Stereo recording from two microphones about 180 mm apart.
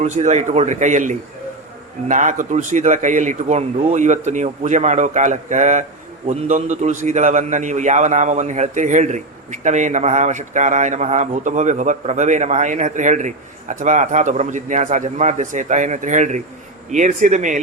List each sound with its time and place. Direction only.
0.0 s a man's voice: 40° right (ahead or behind)